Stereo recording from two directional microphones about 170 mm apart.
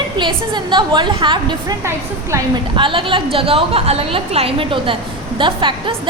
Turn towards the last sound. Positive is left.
turn(degrees=-30)  # may be behind; listen again after turning